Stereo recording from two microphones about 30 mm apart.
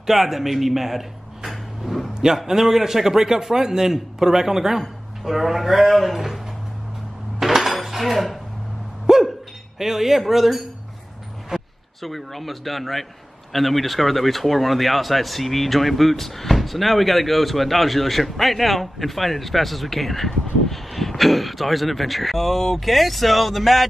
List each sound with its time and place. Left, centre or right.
0.0 s speech: centre
1.5 s a sound: centre
2.3 s a man's voice: centre
7.3 s dishes: centre
9.1 s dog: centre
9.8 s a man's voice: centre
11.5 s a sound: centre
12.0 s speech: centre